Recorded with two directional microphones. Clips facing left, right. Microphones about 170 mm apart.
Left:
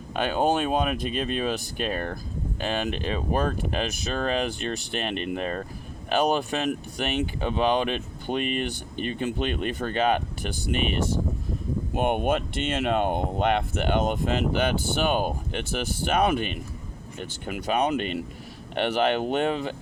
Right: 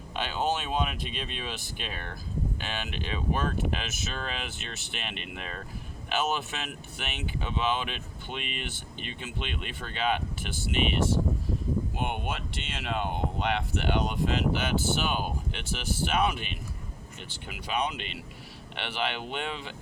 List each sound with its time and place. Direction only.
0.1 s speech: 50° left (ahead or behind)